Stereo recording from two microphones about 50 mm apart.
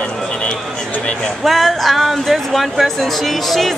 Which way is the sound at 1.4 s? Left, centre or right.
Centre.